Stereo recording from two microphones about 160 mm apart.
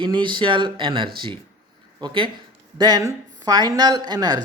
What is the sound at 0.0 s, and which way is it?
Speech, 30° right (ahead or behind).